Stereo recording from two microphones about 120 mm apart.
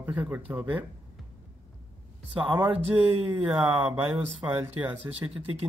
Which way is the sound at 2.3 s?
15° right (ahead or behind).